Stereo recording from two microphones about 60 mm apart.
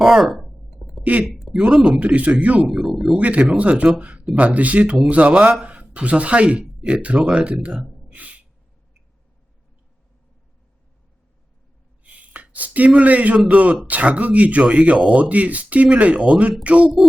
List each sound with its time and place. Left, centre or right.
0.0 s a sound: centre
1.5 s speech: centre
2.6 s speech: centre
3.2 s speech: right
4.0 s a sound: right
4.4 s speech: right
8.1 s gasp: right
12.0 s a sound: right
13.5 s speech: right